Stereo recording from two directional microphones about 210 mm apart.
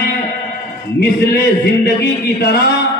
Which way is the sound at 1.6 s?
50° left (ahead or behind).